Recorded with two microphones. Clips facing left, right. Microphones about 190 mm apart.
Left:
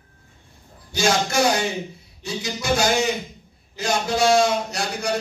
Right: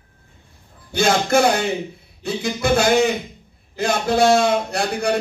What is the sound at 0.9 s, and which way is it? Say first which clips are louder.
A man's voice: right 4 dB; 55° right (ahead or behind).